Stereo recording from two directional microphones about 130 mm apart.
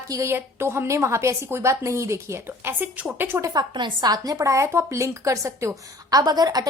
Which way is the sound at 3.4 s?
35° right (ahead or behind).